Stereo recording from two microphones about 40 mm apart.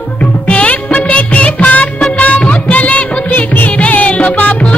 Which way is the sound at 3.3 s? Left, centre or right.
Left.